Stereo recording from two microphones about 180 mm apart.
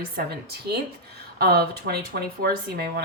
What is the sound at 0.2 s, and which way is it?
Speech, 60° right (ahead or behind).